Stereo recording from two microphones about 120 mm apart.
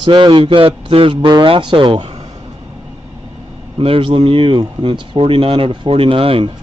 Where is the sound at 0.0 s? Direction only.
40° right (ahead or behind).